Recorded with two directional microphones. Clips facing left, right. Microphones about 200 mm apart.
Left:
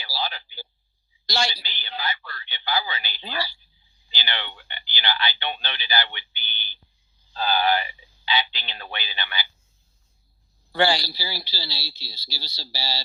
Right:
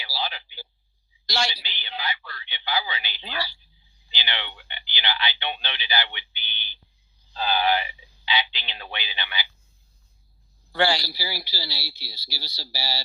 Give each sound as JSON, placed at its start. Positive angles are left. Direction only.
{"t": 0.0, "sound": "a sound", "side_deg": 45}
{"t": 1.5, "sound": "speech", "side_deg": 45}
{"t": 10.7, "sound": "speech", "side_deg": 20}
{"t": 11.1, "sound": "speech", "side_deg": -10}